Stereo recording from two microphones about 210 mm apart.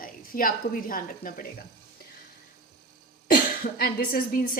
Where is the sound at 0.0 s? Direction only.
40° left (ahead or behind).